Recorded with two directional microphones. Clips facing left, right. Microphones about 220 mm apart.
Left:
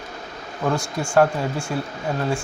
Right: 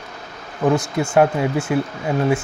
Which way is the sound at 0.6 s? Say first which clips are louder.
Right 6 dB; 20° right (ahead or behind).